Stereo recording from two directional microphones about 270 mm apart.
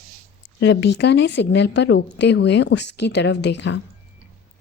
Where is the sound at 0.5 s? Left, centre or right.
Left.